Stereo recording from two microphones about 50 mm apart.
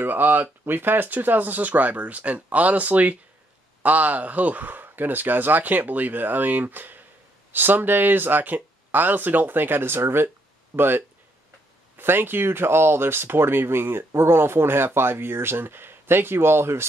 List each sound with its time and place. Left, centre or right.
0.0 s speech: right